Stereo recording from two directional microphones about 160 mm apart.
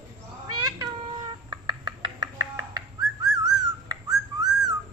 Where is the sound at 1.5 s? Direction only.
30° right (ahead or behind).